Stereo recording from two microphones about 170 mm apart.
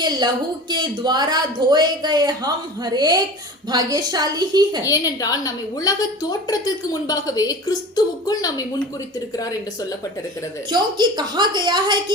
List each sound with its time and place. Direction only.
0.7 s speech: 25° right (ahead or behind)
4.9 s a woman's voice: 20° left (ahead or behind)
10.7 s speech: 25° right (ahead or behind)